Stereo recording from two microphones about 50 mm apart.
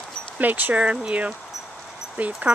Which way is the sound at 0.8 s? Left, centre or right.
Right.